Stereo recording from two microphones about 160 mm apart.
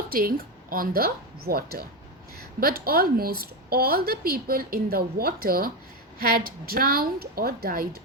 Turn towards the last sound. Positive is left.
turn(degrees=-70)  # may be behind; listen again after turning